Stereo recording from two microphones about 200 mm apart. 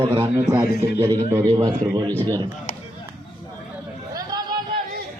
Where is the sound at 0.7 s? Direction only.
55° left (ahead or behind).